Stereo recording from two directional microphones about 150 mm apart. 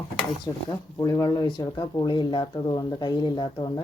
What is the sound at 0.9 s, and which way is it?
Speech, 25° left (ahead or behind).